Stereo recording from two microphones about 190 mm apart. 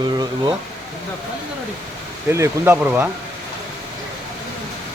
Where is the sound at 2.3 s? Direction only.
15° right (ahead or behind).